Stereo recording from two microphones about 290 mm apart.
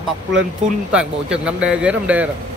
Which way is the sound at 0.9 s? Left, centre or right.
Centre.